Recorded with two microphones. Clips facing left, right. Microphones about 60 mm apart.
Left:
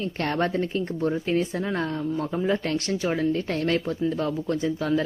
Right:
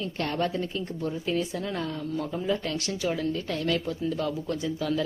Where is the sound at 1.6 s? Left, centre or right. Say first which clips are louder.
Left 4 dB; left.